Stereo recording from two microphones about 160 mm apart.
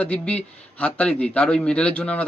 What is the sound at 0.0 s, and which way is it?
A man's voice, 10° left (ahead or behind).